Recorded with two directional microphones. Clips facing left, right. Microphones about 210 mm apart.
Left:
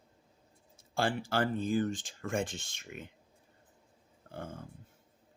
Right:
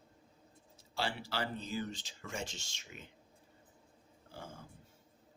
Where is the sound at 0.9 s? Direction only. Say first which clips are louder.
Left 7 dB; 50° left (ahead or behind).